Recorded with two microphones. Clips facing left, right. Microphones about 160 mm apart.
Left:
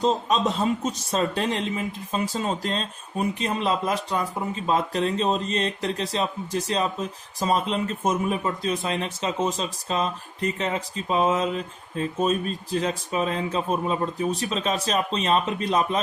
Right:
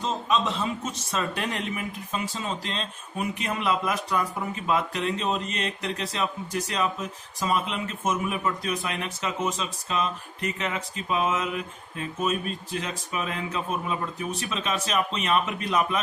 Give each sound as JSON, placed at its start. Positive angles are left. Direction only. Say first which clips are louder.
{"t": 0.0, "sound": "speech", "louder": "left 4 dB", "side_deg": 35}
{"t": 2.3, "sound": "speech", "louder": "left 5 dB", "side_deg": 40}